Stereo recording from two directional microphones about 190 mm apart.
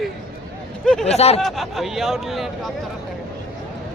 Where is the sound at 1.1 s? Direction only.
35° left (ahead or behind).